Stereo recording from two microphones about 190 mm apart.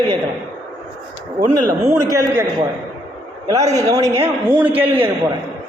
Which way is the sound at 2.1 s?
15° right (ahead or behind).